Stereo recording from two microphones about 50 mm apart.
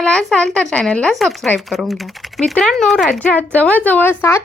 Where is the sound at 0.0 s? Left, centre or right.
Centre.